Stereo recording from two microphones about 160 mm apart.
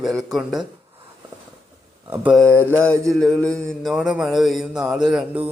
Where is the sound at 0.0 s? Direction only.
Centre (ahead or behind).